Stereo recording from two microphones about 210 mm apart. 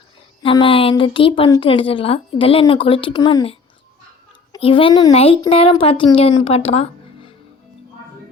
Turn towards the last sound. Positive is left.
turn(degrees=30)  # may be behind; listen again after turning